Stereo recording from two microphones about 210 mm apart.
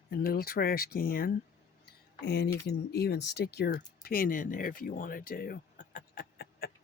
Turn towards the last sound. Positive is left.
turn(degrees=45)  # may be behind; listen again after turning